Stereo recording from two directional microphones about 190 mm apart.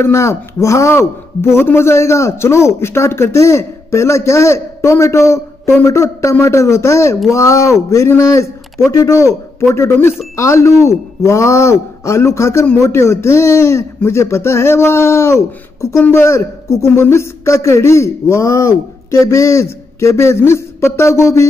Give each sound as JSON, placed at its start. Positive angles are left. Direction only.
{"t": 0.0, "sound": "a man's voice", "side_deg": 15}